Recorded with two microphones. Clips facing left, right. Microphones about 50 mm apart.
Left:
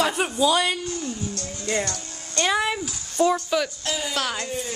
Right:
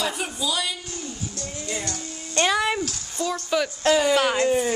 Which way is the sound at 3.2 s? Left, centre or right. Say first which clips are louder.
Left 7 dB; left.